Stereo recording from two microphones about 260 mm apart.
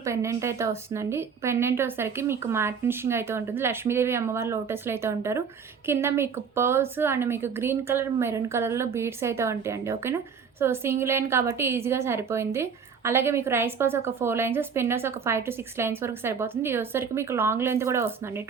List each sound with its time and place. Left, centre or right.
0.0 s speech: centre